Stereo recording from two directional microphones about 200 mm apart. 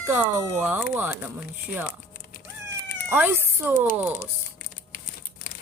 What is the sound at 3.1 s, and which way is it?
Speech, 10° right (ahead or behind).